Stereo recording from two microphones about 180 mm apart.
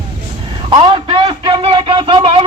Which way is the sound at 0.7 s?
25° right (ahead or behind).